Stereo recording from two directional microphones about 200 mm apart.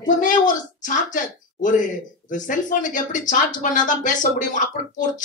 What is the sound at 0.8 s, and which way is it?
Speech, 40° left (ahead or behind).